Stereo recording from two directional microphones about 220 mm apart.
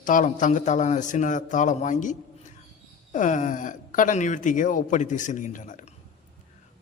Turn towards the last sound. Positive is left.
turn(degrees=35)  # may be behind; listen again after turning